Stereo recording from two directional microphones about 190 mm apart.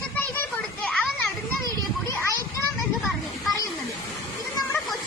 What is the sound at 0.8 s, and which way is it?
Children playing, 5° left (ahead or behind).